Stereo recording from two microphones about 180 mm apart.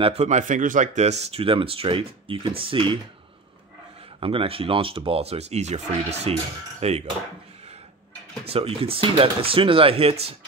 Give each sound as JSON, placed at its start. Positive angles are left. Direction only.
{"t": 0.0, "sound": "speech", "side_deg": -40}
{"t": 4.2, "sound": "speech", "side_deg": -30}
{"t": 8.5, "sound": "speech", "side_deg": -30}